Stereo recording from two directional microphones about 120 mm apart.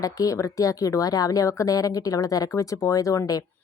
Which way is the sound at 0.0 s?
30° left (ahead or behind).